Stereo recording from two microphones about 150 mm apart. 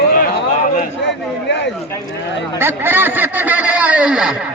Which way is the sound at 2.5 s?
15° right (ahead or behind).